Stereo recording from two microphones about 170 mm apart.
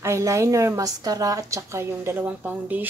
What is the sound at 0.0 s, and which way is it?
A woman's voice, 15° right (ahead or behind).